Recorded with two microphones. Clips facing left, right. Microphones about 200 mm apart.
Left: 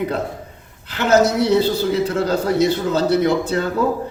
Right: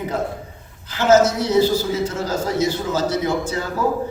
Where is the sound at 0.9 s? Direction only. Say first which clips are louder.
Right 1 dB; 65° left (ahead or behind).